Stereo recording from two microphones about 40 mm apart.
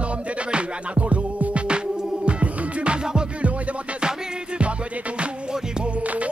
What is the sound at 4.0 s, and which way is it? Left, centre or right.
Music, right.